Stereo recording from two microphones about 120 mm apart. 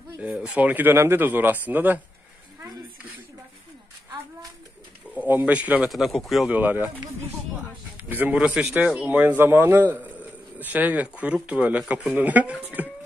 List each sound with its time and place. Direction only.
0.2 s speech: 10° right (ahead or behind)
5.1 s speech: 10° right (ahead or behind)
5.9 s speech: centre (ahead or behind)
6.5 s speech: 15° right (ahead or behind)
8.0 s speech: 15° right (ahead or behind)